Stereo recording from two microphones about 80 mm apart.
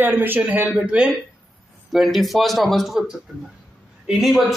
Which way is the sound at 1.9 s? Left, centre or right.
Centre.